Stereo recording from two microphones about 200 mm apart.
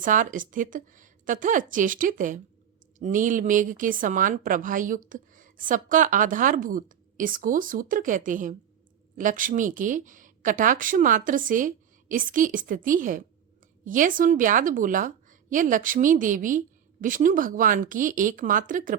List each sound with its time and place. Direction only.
0.0 s a woman's voice: 40° right (ahead or behind)